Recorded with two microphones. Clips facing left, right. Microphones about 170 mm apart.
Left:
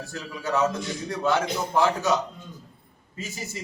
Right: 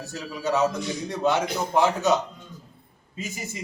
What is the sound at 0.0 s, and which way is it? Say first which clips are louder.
A man's voice: right 3 dB; 20° right (ahead or behind).